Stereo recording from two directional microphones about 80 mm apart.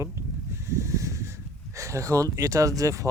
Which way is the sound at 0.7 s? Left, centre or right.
Right.